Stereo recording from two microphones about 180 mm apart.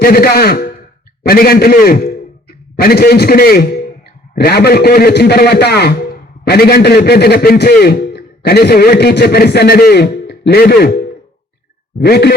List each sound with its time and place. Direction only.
0.0 s a man's voice: 60° left (ahead or behind)
11.9 s a man's voice: 65° left (ahead or behind)